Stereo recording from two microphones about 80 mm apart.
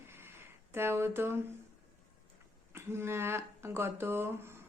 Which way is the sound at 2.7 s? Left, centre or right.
Right.